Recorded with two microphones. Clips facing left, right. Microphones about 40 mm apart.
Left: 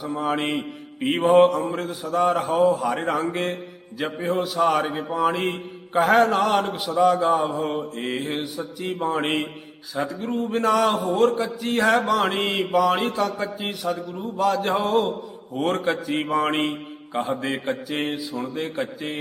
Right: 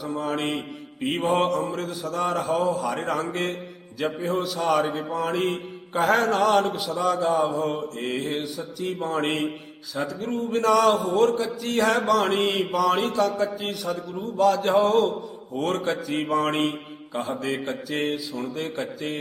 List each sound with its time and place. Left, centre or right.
0.0 s a man's voice: centre
1.2 s mantra: centre
2.0 s a man's voice: centre
6.0 s mantra: centre
6.7 s a man's voice: centre
10.9 s a man's voice: centre
14.2 s mantra: centre
15.6 s a man's voice: centre